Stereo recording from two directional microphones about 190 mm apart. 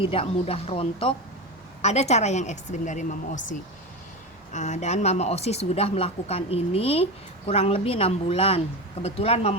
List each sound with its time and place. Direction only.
0.0 s speech: 30° left (ahead or behind)
4.5 s speech: 40° left (ahead or behind)